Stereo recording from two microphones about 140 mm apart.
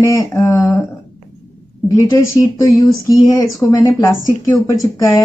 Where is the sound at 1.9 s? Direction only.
25° left (ahead or behind).